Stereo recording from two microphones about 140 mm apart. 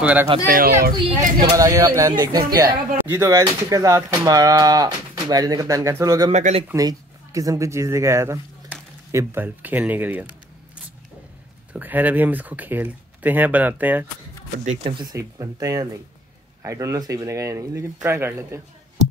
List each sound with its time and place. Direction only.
0.0 s speech: 10° right (ahead or behind)
0.5 s speech: 90° right
1.4 s speech: 25° right (ahead or behind)
6.3 s speech: 55° right (ahead or behind)
6.7 s speech: 25° right (ahead or behind)
11.7 s speech: 10° right (ahead or behind)
14.6 s speech: 55° right (ahead or behind)
14.9 s speech: 30° right (ahead or behind)